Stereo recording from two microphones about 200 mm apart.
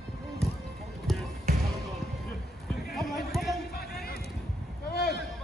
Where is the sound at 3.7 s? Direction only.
50° left (ahead or behind).